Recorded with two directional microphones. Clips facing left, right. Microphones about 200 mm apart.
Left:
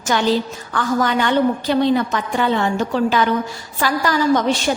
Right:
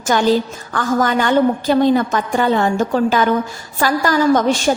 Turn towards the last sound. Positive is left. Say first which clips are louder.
# right 3 dB
turn(degrees=-45)  # may be behind; listen again after turning